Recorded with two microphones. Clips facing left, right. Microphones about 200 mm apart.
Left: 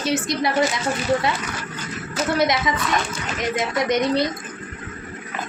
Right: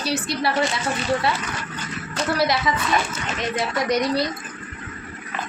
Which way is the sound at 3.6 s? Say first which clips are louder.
Left 1 dB; 20° left (ahead or behind).